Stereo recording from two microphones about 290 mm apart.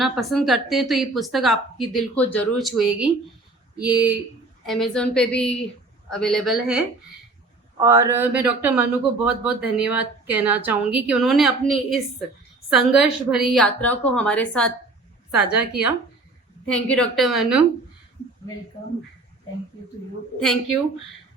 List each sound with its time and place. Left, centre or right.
0.0 s speech: centre